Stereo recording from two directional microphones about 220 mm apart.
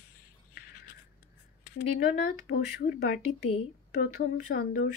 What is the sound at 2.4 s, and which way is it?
Speech, 50° left (ahead or behind).